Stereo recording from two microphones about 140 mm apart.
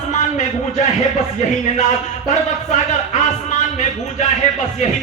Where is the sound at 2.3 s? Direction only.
55° left (ahead or behind).